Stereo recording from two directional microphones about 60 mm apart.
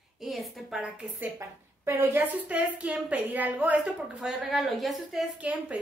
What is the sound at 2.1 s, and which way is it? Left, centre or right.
A woman's voice, right.